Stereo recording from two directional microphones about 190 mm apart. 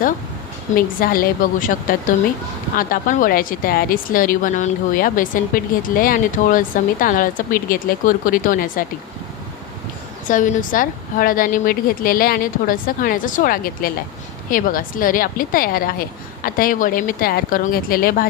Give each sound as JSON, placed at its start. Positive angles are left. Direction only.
{"t": 0.8, "sound": "speech", "side_deg": 50}
{"t": 10.2, "sound": "speech", "side_deg": 45}